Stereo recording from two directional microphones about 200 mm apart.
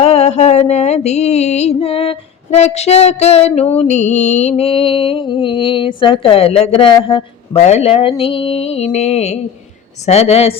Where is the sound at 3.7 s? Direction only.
35° left (ahead or behind).